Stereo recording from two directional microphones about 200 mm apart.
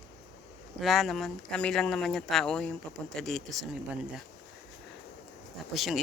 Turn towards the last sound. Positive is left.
turn(degrees=0)  # may be behind; listen again after turning